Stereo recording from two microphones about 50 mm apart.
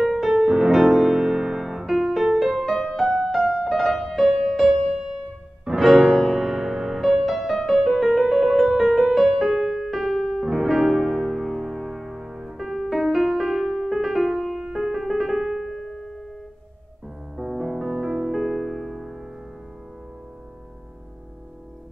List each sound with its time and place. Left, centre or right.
0.0 s music: centre
5.8 s music: centre
14.6 s piano: centre
17.4 s music: centre